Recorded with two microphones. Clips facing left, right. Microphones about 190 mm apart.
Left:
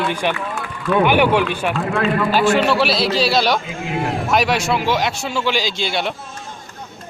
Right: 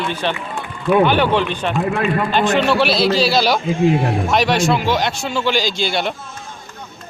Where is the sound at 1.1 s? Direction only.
10° left (ahead or behind).